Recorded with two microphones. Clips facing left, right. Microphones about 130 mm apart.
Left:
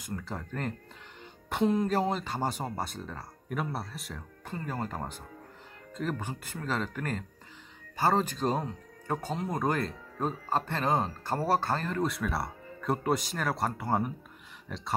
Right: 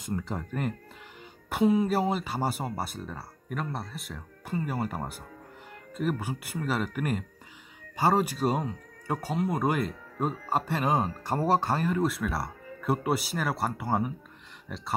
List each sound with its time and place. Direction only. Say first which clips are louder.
0.0 s speech: right 5 dB; 20° right (ahead or behind); by 14.8 s 5° right (ahead or behind)